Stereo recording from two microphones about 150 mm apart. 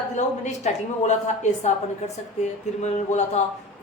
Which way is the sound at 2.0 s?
45° left (ahead or behind).